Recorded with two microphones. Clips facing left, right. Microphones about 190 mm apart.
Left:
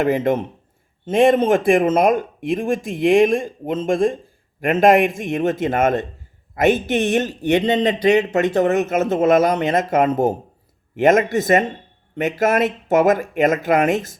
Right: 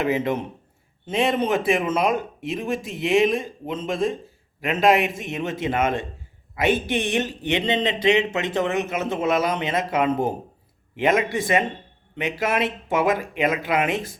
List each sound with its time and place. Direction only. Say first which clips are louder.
0.0 s a man's voice: left 5 dB; 50° left (ahead or behind)